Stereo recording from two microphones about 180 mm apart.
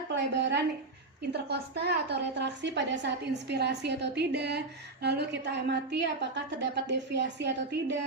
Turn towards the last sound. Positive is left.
turn(degrees=-75)  # may be behind; listen again after turning